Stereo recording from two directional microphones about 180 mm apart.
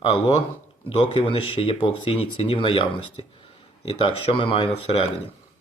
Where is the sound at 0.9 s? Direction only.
30° left (ahead or behind).